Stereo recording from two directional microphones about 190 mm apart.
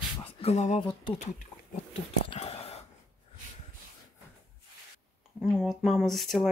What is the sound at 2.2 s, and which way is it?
Speech, 35° left (ahead or behind).